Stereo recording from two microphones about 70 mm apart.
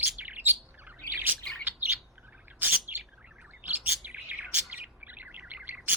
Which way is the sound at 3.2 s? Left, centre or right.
Centre.